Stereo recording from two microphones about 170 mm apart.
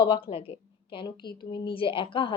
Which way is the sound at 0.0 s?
30° left (ahead or behind).